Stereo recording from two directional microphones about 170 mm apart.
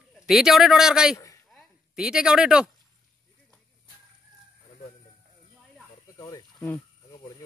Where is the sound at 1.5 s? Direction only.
5° right (ahead or behind).